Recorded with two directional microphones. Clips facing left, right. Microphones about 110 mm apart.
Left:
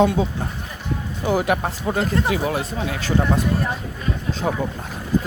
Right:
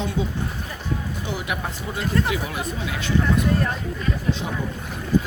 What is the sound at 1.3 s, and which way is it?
Speech, 40° left (ahead or behind).